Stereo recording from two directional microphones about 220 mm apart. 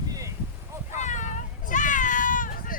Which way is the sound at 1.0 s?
35° left (ahead or behind).